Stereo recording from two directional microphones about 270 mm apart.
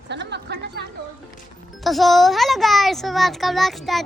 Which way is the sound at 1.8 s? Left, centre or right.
Centre.